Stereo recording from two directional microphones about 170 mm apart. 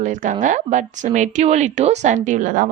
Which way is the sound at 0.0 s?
50° right (ahead or behind).